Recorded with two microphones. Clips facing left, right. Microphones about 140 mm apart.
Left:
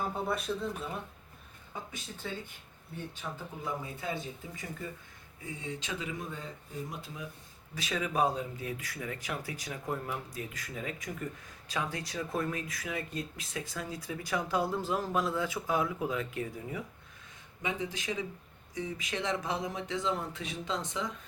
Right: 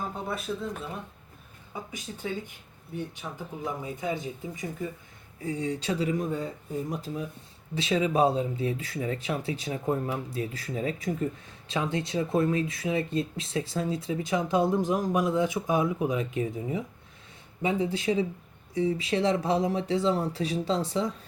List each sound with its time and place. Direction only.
0.3 s speech: centre (ahead or behind)
1.7 s speech: 15° right (ahead or behind)
5.4 s speech: 40° right (ahead or behind)
7.8 s speech: 25° right (ahead or behind)
17.6 s speech: 30° right (ahead or behind)